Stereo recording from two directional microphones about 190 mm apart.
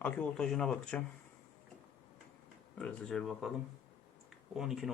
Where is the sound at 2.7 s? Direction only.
5° left (ahead or behind).